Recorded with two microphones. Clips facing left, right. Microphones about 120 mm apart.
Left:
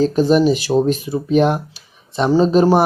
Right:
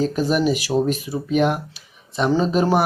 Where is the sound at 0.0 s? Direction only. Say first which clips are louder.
Left 6 dB; 30° left (ahead or behind).